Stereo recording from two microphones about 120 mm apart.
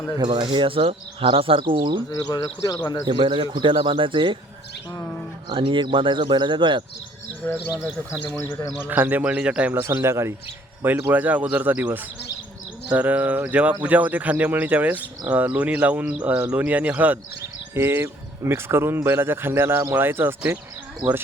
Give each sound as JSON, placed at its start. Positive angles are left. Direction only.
{"t": 0.3, "sound": "speech", "side_deg": -45}
{"t": 2.3, "sound": "speech", "side_deg": 30}
{"t": 3.1, "sound": "speech", "side_deg": -40}
{"t": 4.9, "sound": "speech", "side_deg": 15}
{"t": 5.5, "sound": "speech", "side_deg": -45}
{"t": 7.4, "sound": "speech", "side_deg": 10}
{"t": 8.9, "sound": "speech", "side_deg": -15}
{"t": 9.8, "sound": "speech", "side_deg": -25}
{"t": 12.9, "sound": "speech", "side_deg": -15}